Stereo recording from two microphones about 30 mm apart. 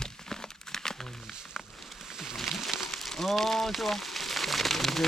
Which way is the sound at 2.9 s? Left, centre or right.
Centre.